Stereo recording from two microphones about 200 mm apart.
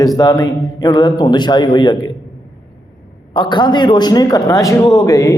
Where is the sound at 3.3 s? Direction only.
25° left (ahead or behind).